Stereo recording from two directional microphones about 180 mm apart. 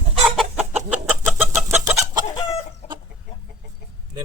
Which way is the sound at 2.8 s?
50° left (ahead or behind).